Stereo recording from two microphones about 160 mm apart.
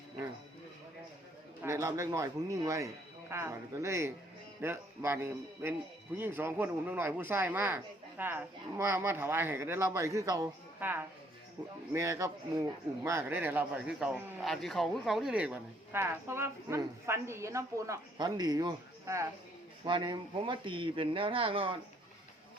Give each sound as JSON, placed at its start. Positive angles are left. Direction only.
{"t": 1.6, "sound": "a man's voice", "side_deg": -20}
{"t": 19.8, "sound": "speech", "side_deg": -30}